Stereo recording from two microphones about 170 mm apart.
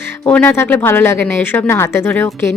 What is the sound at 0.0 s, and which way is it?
Speech, 10° left (ahead or behind).